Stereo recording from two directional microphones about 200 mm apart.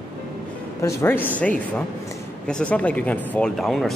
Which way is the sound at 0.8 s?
10° left (ahead or behind).